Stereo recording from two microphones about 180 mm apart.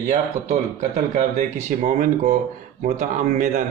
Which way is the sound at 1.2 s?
45° right (ahead or behind).